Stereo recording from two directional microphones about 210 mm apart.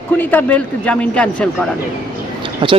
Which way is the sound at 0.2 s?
10° left (ahead or behind).